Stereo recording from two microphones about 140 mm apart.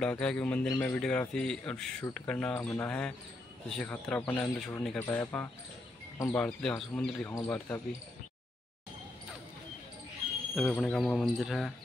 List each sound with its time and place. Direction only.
0.0 s a man's voice: 5° left (ahead or behind)
10.7 s speech: 10° left (ahead or behind)